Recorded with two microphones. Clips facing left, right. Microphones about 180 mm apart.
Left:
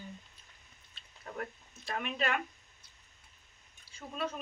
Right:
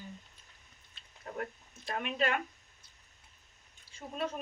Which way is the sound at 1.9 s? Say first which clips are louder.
Right 1 dB; 40° right (ahead or behind).